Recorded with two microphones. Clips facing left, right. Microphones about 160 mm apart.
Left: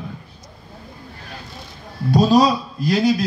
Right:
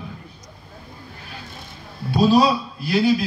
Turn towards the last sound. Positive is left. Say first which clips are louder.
# left 1 dB
turn(degrees=40)  # may be behind; listen again after turning